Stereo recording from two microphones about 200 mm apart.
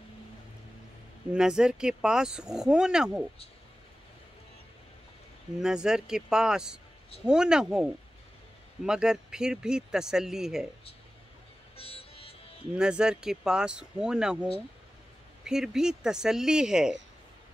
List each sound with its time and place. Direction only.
1.3 s speech: 5° right (ahead or behind)
5.6 s speech: 5° right (ahead or behind)
11.7 s music: 30° left (ahead or behind)
12.7 s speech: 5° right (ahead or behind)